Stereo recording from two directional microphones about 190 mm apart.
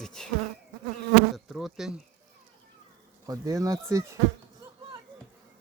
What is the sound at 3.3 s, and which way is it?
Speech, 20° right (ahead or behind).